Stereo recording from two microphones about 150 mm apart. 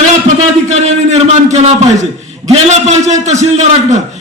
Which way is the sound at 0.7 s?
50° right (ahead or behind).